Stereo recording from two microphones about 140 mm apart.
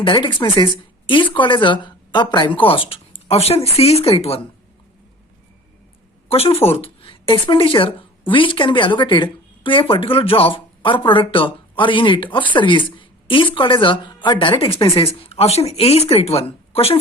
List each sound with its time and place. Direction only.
0.0 s speech: 35° left (ahead or behind)
6.2 s a woman's voice: 45° left (ahead or behind)